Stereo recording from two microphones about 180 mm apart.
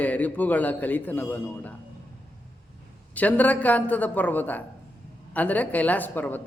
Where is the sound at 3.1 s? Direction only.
10° left (ahead or behind).